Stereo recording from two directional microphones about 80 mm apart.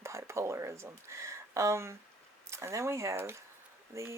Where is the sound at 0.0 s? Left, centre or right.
Right.